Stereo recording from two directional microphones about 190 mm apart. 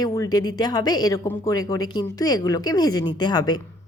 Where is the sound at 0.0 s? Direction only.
20° left (ahead or behind).